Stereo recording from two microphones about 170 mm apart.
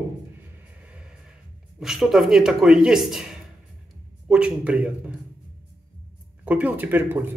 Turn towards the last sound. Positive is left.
turn(degrees=-10)  # may be behind; listen again after turning